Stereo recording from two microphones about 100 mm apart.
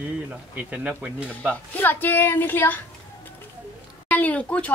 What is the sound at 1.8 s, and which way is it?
Child singing, 20° left (ahead or behind).